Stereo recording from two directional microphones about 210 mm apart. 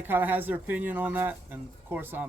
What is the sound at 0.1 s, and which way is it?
Speech, 10° right (ahead or behind).